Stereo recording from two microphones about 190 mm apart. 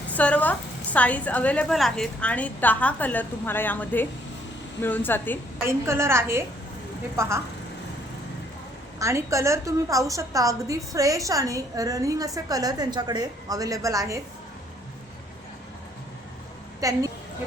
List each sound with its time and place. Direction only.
0.1 s a woman's voice: 10° left (ahead or behind)
5.6 s a woman's voice: 15° right (ahead or behind)
9.0 s a woman's voice: 15° right (ahead or behind)
16.8 s a woman's voice: 20° right (ahead or behind)